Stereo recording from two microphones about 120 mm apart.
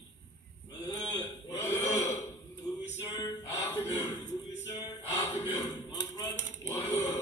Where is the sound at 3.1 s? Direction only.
30° left (ahead or behind).